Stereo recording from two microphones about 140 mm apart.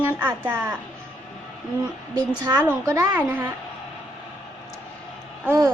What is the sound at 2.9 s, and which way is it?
Speech, 20° right (ahead or behind).